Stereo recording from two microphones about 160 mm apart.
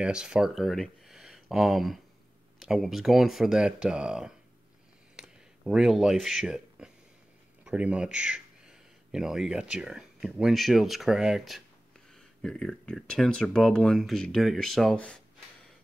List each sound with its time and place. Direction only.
0.0 s speech: 5° right (ahead or behind)
5.1 s a sound: 5° right (ahead or behind)
7.6 s speech: 5° right (ahead or behind)